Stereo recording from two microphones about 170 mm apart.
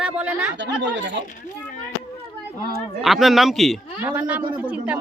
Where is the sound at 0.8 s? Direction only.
90° right.